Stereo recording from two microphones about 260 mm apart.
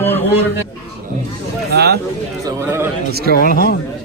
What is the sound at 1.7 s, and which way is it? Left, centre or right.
Speech, right.